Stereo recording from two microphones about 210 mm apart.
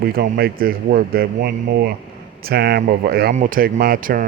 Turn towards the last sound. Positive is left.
turn(degrees=-45)  # may be behind; listen again after turning